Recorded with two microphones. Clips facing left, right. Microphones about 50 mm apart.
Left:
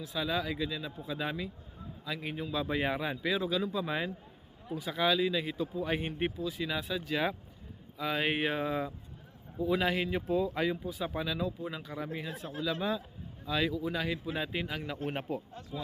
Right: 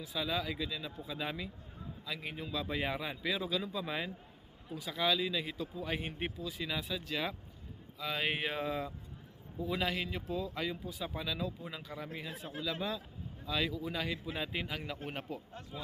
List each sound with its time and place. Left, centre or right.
0.0 s a man's voice: centre
10.1 s a man's voice: left
10.8 s a man's voice: centre
13.4 s speech: centre
15.1 s a man's voice: left